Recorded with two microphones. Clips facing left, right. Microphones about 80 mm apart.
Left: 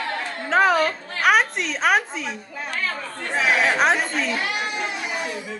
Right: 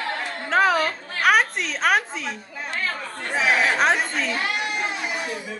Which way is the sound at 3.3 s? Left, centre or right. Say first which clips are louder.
Left 1 dB; centre.